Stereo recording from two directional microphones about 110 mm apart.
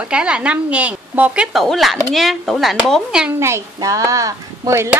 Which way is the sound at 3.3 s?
25° right (ahead or behind).